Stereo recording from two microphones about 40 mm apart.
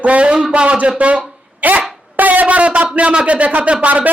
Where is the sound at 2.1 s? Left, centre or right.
Right.